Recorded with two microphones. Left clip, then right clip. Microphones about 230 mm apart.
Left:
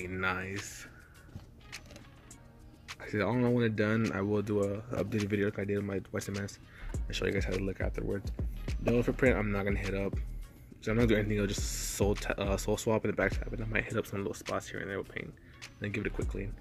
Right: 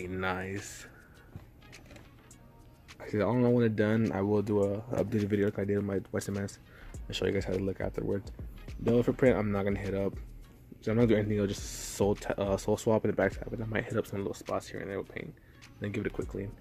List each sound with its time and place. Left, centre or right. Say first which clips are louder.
0.0 s speech: even; centre
3.0 s speech: right 2 dB; centre
4.9 s speech: right 3 dB; centre
5.3 s speech: right 1 dB; centre